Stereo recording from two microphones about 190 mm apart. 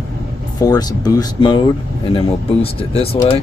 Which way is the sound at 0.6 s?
20° left (ahead or behind).